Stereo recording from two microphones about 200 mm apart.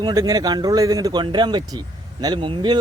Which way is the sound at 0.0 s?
20° right (ahead or behind).